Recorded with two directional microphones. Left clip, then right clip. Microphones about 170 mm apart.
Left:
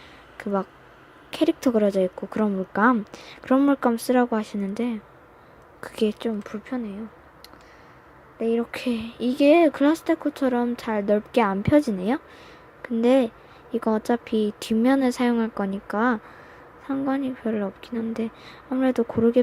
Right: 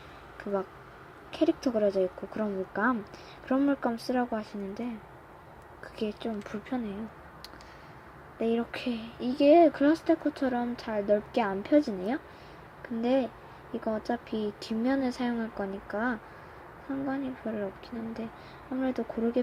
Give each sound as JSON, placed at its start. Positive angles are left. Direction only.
{"t": 0.3, "sound": "speech", "side_deg": 35}
{"t": 6.5, "sound": "speech", "side_deg": 20}
{"t": 8.4, "sound": "speech", "side_deg": 15}